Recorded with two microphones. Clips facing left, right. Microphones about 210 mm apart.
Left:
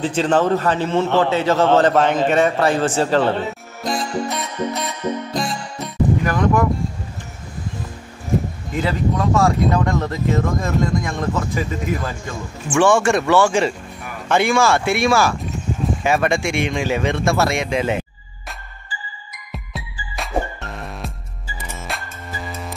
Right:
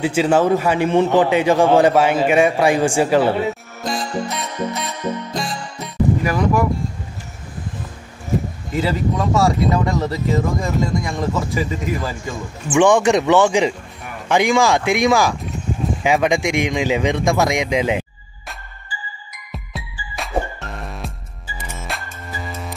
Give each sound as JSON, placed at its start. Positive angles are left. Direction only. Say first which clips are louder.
{"t": 0.0, "sound": "a man's voice", "louder": "right 2 dB", "side_deg": -10}
{"t": 3.8, "sound": "music", "louder": "left 1 dB", "side_deg": 0}
{"t": 8.8, "sound": "speech", "louder": "left 1 dB", "side_deg": 0}
{"t": 12.7, "sound": "a man's voice", "louder": "right 2 dB", "side_deg": -15}
{"t": 19.5, "sound": "music", "louder": "even", "side_deg": 0}